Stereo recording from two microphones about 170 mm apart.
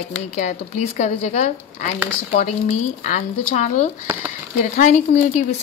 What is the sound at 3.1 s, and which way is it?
Speech, 45° left (ahead or behind).